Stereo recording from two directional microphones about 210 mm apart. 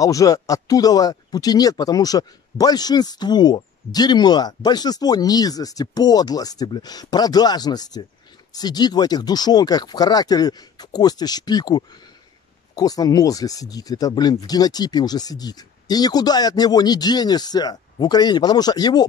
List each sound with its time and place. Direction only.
0.0 s speech: 15° left (ahead or behind)